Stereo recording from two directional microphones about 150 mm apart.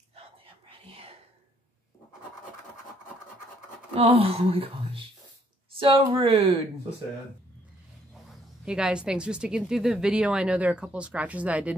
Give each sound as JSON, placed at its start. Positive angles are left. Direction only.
{"t": 0.1, "sound": "whispering", "side_deg": -40}
{"t": 3.9, "sound": "speech", "side_deg": -40}
{"t": 8.6, "sound": "speech", "side_deg": -5}